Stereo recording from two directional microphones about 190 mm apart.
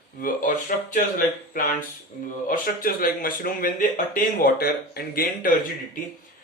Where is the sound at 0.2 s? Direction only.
45° left (ahead or behind).